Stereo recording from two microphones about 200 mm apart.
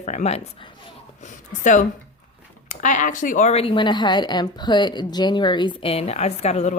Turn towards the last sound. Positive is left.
turn(degrees=35)  # may be behind; listen again after turning